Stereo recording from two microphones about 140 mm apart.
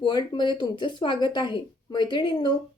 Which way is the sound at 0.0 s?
30° left (ahead or behind).